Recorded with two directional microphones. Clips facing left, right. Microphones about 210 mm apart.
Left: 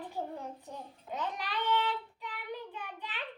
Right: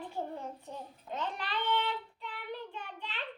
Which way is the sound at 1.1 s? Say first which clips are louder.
Even; 15° left (ahead or behind).